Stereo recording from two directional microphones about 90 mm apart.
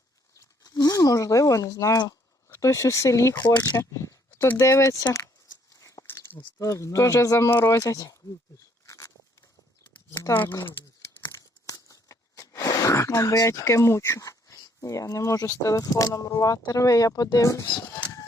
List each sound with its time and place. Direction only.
0.3 s a sound: 45° left (ahead or behind)
2.5 s speech: 35° left (ahead or behind)
3.3 s speech: 50° left (ahead or behind)
3.9 s speech: 30° left (ahead or behind)
6.1 s a sound: 25° left (ahead or behind)
6.6 s speech: 35° left (ahead or behind)
8.5 s a sound: 35° left (ahead or behind)
11.3 s crunch: 40° left (ahead or behind)
17.3 s speech: 40° left (ahead or behind)